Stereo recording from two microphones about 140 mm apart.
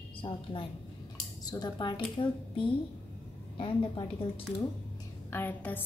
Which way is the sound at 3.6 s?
40° left (ahead or behind).